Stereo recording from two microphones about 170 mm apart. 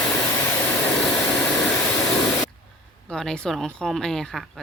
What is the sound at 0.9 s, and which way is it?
Vehicle, 10° left (ahead or behind).